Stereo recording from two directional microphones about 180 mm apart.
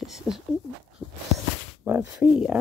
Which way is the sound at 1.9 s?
5° right (ahead or behind).